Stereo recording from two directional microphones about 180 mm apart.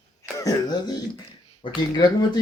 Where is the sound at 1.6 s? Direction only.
20° left (ahead or behind).